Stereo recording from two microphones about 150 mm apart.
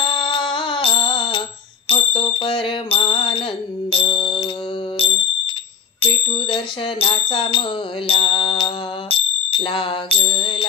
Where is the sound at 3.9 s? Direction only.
35° left (ahead or behind).